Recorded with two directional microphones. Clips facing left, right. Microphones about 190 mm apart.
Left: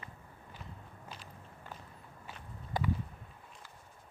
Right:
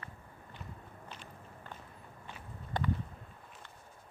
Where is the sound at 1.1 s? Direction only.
10° left (ahead or behind).